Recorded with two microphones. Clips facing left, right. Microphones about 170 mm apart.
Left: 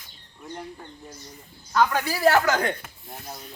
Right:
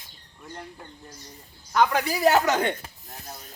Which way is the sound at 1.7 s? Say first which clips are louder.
Even; 15° right (ahead or behind).